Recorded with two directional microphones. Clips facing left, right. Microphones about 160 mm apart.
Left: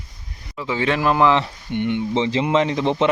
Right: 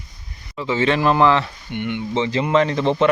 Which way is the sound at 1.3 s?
30° left (ahead or behind).